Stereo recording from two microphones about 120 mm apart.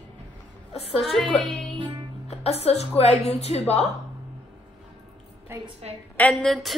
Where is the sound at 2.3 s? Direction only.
60° left (ahead or behind).